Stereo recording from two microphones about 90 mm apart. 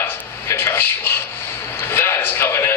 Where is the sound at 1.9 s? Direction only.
25° left (ahead or behind).